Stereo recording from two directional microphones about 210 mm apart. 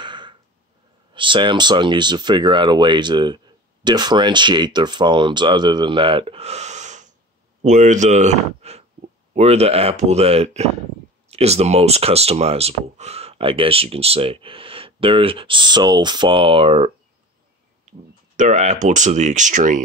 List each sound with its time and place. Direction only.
0.0 s a sound: 20° right (ahead or behind)
1.1 s speech: 25° right (ahead or behind)
18.3 s speech: 35° right (ahead or behind)